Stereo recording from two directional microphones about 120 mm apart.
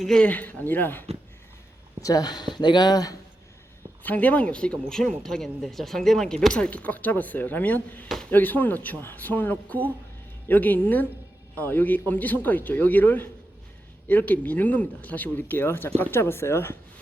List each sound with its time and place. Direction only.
0.0 s speech: 5° left (ahead or behind)
2.0 s speech: 30° left (ahead or behind)
4.0 s speech: 15° left (ahead or behind)
8.0 s speech: centre (ahead or behind)
8.3 s speech: 15° left (ahead or behind)